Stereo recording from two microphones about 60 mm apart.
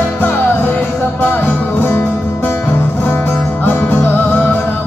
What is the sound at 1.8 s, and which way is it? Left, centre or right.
Music, left.